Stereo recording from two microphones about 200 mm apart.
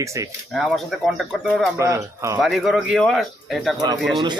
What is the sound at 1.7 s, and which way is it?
Speech, 15° right (ahead or behind).